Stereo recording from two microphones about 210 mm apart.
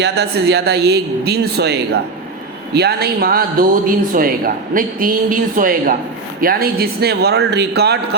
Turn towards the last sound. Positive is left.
turn(degrees=-50)  # may be behind; listen again after turning